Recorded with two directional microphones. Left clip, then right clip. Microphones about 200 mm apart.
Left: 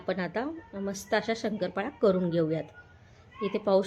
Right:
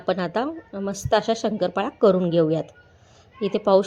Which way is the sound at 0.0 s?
25° right (ahead or behind).